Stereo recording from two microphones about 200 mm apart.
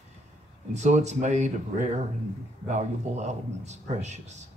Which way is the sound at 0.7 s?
35° right (ahead or behind).